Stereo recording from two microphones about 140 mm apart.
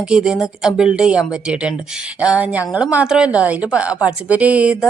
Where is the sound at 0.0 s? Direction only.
5° right (ahead or behind).